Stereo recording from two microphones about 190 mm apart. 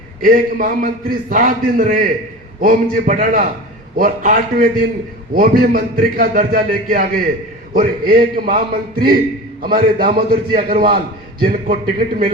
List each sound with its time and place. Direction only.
0.2 s a man's voice: 45° right (ahead or behind)